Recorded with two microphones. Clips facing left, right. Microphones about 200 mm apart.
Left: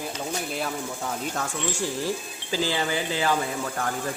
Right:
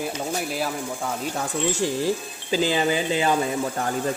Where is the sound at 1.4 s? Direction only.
15° right (ahead or behind).